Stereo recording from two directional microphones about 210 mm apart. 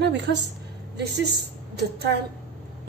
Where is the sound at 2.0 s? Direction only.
50° right (ahead or behind).